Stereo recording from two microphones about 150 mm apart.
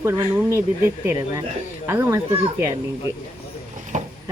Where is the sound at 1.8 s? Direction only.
15° right (ahead or behind).